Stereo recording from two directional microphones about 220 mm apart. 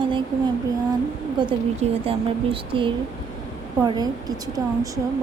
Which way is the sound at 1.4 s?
25° right (ahead or behind).